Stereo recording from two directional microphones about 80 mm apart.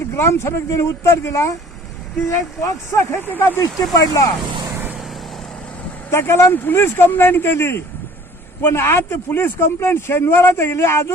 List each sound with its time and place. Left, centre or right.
0.2 s speech: left
2.6 s speech: left
3.2 s speech: left
3.6 s speech: left
6.1 s speech: left